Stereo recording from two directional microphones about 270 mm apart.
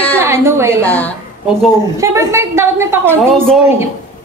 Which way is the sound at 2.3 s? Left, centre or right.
Centre.